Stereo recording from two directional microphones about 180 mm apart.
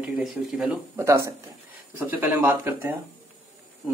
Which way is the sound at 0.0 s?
5° right (ahead or behind).